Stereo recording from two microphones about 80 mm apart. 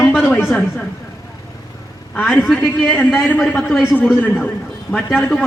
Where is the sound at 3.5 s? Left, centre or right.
Centre.